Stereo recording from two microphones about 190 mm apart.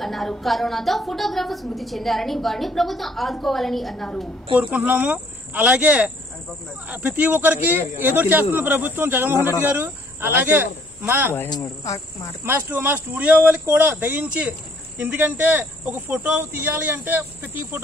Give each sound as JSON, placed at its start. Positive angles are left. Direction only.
{"t": 0.0, "sound": "a woman's voice", "side_deg": 0}
{"t": 4.6, "sound": "speech", "side_deg": -10}
{"t": 11.3, "sound": "cricket", "side_deg": 20}
{"t": 12.4, "sound": "speech", "side_deg": -10}